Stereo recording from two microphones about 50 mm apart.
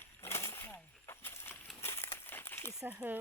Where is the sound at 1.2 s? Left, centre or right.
Left.